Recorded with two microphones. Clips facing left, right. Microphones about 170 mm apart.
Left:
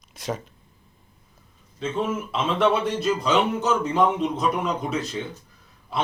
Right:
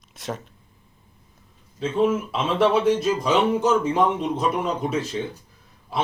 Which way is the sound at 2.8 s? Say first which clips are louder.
Right 3 dB; 10° right (ahead or behind).